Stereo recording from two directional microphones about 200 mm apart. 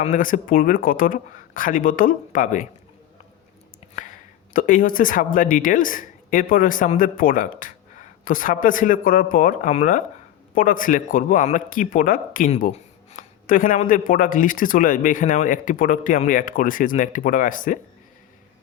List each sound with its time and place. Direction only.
0.0 s speech: 40° left (ahead or behind)
3.9 s speech: 40° left (ahead or behind)